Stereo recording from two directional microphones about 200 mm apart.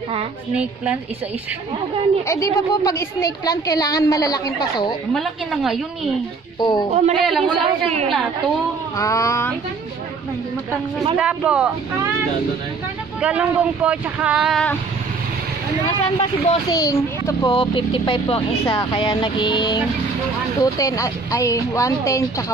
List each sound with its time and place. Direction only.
2.2 s a woman's voice: 15° left (ahead or behind)
5.1 s speech: centre (ahead or behind)
6.6 s a child's voice: 20° left (ahead or behind)
7.2 s speech: centre (ahead or behind)
8.9 s a woman's voice: 15° left (ahead or behind)
11.1 s speech: 5° right (ahead or behind)
13.2 s speech: 5° right (ahead or behind)
16.0 s a child's voice: 20° left (ahead or behind)